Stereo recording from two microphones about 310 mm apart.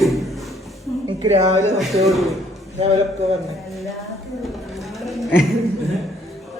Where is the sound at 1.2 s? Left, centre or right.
Centre.